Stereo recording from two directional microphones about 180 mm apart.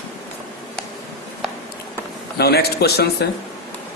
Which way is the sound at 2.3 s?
60° left (ahead or behind).